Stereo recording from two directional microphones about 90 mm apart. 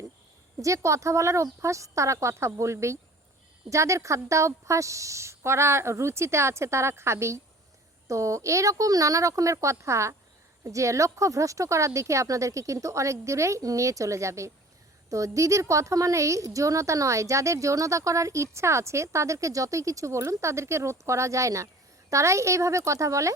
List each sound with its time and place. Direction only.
0.6 s a woman's voice: 35° right (ahead or behind)